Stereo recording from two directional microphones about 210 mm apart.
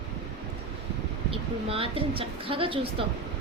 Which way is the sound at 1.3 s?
25° right (ahead or behind).